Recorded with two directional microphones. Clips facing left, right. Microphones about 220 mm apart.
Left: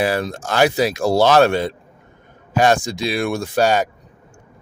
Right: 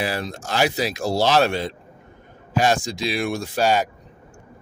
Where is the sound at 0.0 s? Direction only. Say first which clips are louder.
Left 6 dB; 50° left (ahead or behind).